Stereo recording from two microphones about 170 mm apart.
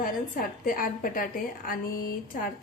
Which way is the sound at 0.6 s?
55° left (ahead or behind).